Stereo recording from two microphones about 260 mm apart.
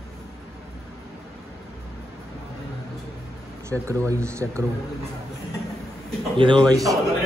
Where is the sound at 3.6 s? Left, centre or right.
Centre.